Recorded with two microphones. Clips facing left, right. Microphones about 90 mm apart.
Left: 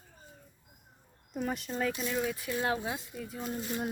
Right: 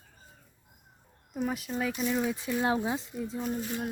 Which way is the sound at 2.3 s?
25° right (ahead or behind).